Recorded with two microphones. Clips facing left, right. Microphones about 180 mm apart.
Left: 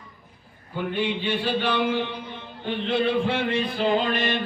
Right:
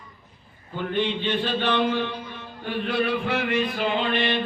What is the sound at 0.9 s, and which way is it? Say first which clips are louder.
Music: right 2 dB; 10° left (ahead or behind).